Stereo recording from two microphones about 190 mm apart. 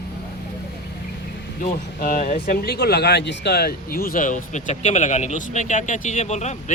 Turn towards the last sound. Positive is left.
turn(degrees=35)  # may be behind; listen again after turning